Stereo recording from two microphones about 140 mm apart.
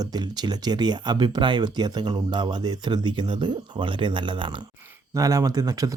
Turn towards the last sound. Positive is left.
turn(degrees=-25)  # may be behind; listen again after turning